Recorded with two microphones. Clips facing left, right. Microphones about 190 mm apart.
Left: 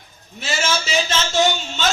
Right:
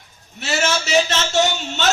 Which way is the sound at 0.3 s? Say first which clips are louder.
Right 2 dB; 65° right (ahead or behind).